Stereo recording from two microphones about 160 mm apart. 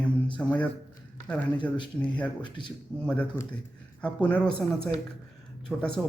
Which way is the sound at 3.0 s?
10° left (ahead or behind).